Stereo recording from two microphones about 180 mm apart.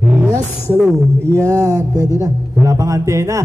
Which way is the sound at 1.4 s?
15° right (ahead or behind).